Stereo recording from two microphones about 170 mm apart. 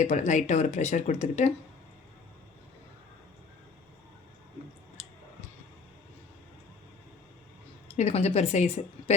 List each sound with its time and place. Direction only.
0.0 s speech: 45° left (ahead or behind)
5.0 s a sound: 40° left (ahead or behind)
7.9 s speech: 35° left (ahead or behind)